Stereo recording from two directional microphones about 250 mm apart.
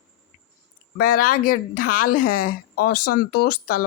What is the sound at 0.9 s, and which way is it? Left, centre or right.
Speech, left.